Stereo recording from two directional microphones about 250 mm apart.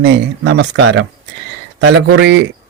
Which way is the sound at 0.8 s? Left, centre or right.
Right.